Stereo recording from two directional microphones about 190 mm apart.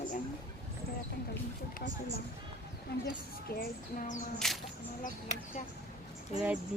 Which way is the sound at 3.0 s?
55° left (ahead or behind).